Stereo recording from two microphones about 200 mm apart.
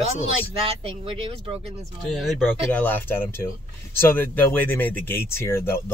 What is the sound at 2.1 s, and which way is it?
Speech, centre (ahead or behind).